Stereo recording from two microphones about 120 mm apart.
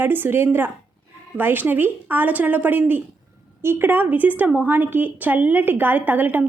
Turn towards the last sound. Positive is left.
turn(degrees=-15)  # may be behind; listen again after turning